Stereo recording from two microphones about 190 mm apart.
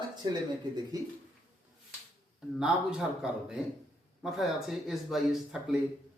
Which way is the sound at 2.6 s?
5° right (ahead or behind).